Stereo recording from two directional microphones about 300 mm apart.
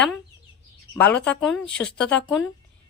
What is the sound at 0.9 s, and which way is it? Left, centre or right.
Speech, centre.